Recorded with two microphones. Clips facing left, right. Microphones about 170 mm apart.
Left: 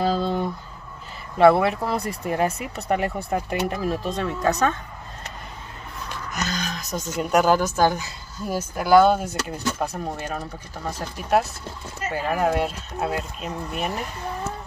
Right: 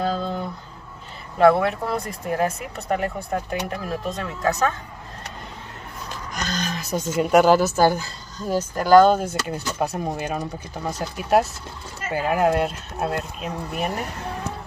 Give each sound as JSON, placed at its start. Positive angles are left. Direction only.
{"t": 1.4, "sound": "speech", "side_deg": 5}
{"t": 6.3, "sound": "speech", "side_deg": 0}
{"t": 8.4, "sound": "speech", "side_deg": 10}